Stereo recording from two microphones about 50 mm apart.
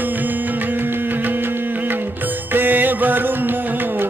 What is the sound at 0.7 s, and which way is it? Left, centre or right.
Music, right.